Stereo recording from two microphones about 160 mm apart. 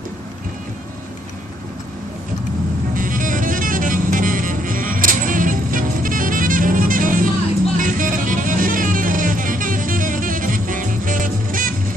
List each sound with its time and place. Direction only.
3.0 s music: 55° right (ahead or behind)